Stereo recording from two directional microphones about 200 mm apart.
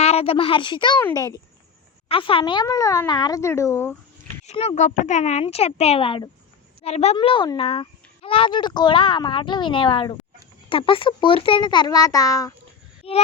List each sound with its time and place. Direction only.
0.0 s a woman's voice: 30° left (ahead or behind); by 3.9 s 10° left (ahead or behind)
4.4 s speech: 30° left (ahead or behind); by 12.5 s 15° left (ahead or behind)
13.0 s a sound: 30° left (ahead or behind)